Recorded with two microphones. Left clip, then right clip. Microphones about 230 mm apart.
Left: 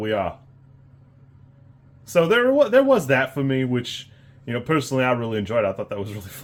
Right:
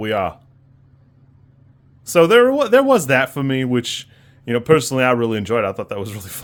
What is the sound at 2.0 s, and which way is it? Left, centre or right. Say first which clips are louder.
Speech: right 6 dB; right.